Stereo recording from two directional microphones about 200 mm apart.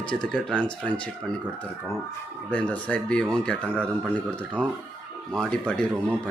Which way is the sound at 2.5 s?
5° left (ahead or behind).